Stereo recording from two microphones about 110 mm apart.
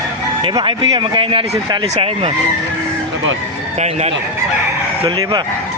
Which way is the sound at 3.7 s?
90° right.